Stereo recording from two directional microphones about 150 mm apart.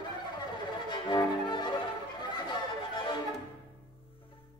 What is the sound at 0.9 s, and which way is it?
Violin, 30° left (ahead or behind).